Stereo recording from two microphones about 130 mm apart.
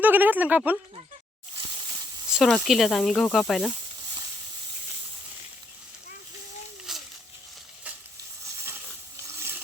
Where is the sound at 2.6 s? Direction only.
Centre (ahead or behind).